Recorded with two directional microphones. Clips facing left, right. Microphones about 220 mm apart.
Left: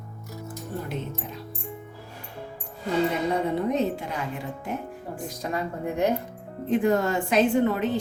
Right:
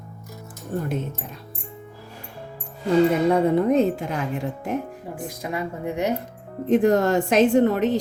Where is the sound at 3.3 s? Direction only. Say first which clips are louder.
Right 7 dB; 50° right (ahead or behind).